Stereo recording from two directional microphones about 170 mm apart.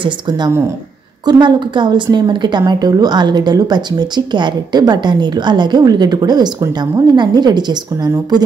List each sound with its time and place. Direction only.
0.0 s a woman's voice: 25° right (ahead or behind)